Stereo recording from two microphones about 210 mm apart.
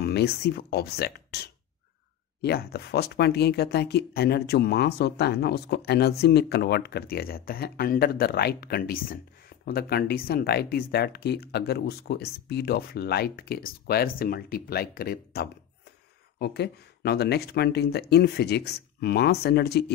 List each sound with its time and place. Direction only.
0.0 s speech: 50° left (ahead or behind)